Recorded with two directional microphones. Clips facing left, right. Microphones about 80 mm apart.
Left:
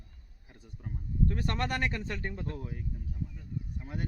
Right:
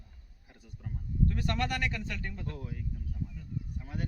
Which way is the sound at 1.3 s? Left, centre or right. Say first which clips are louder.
Even; left.